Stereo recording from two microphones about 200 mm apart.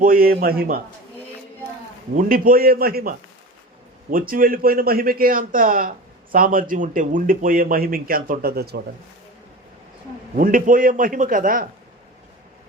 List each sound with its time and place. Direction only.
0.0 s speech: 45° right (ahead or behind)
2.1 s speech: 45° right (ahead or behind)
10.3 s speech: 45° right (ahead or behind)